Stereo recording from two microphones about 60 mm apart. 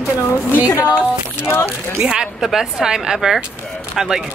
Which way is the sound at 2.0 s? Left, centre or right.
Centre.